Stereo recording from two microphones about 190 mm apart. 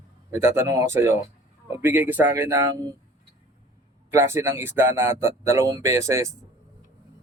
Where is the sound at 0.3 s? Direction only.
15° right (ahead or behind).